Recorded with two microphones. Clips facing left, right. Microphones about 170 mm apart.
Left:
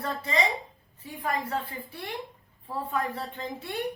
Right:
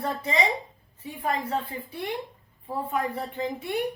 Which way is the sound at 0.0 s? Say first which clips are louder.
Right 2 dB; 20° right (ahead or behind).